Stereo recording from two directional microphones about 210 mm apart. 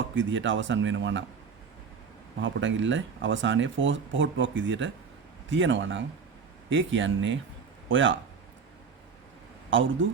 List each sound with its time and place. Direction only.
0.2 s speech: 60° right (ahead or behind)
2.4 s speech: 65° right (ahead or behind)
9.6 s speech: 65° right (ahead or behind)